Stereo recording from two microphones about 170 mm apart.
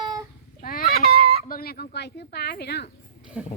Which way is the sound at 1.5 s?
60° left (ahead or behind).